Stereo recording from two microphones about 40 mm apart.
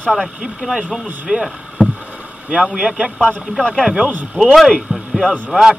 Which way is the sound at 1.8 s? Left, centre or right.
Centre.